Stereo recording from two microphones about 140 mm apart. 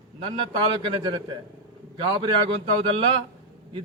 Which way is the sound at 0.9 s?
35° right (ahead or behind).